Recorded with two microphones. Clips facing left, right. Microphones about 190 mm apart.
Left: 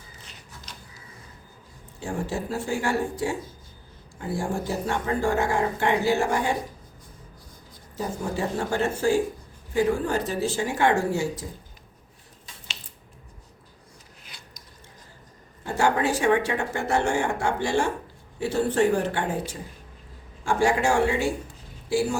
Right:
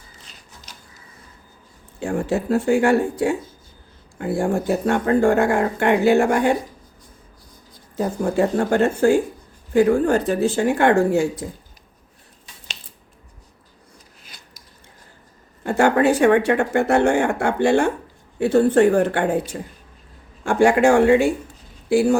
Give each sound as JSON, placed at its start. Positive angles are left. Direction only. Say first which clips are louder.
{"t": 2.0, "sound": "speech", "louder": "right 7 dB", "side_deg": -60}
{"t": 7.9, "sound": "speech", "louder": "right 9 dB", "side_deg": -60}
{"t": 15.6, "sound": "speech", "louder": "right 7 dB", "side_deg": -60}
{"t": 20.4, "sound": "speech", "louder": "right 7 dB", "side_deg": -60}